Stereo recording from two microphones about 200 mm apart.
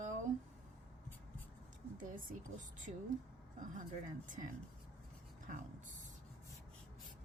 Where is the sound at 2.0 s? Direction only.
40° right (ahead or behind).